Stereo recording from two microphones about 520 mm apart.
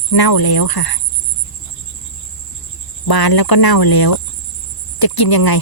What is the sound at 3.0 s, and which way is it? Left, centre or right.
Speech, left.